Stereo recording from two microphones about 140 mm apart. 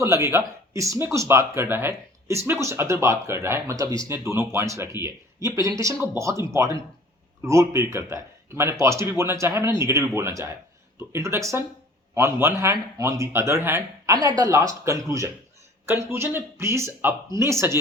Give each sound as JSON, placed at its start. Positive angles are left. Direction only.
{"t": 0.0, "sound": "speech", "side_deg": -20}
{"t": 7.4, "sound": "speech", "side_deg": -20}